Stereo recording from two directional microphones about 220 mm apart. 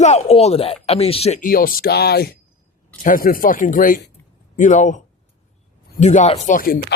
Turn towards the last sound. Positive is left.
turn(degrees=40)  # may be behind; listen again after turning